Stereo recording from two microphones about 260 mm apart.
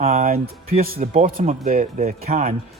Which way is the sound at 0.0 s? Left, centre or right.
Right.